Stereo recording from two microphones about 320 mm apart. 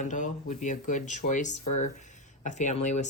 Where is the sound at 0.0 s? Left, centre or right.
Left.